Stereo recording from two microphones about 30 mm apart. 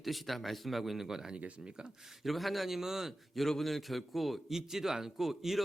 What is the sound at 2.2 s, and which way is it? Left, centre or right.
Speech, centre.